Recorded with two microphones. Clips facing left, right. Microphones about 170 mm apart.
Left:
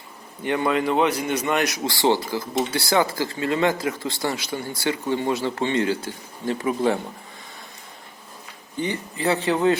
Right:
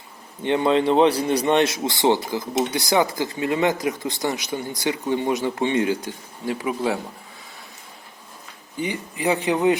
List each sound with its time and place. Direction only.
0.4 s speech: 25° right (ahead or behind); by 7.0 s 5° right (ahead or behind)
8.8 s speech: 15° right (ahead or behind)